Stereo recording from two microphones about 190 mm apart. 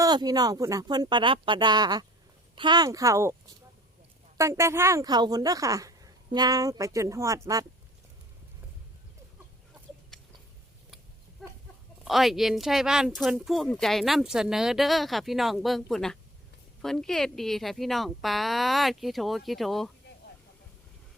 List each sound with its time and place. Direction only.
0.0 s speech: 20° right (ahead or behind)
4.4 s speech: 15° right (ahead or behind)
10.1 s a sound: centre (ahead or behind)
11.4 s chicken: centre (ahead or behind)
12.0 s speech: centre (ahead or behind)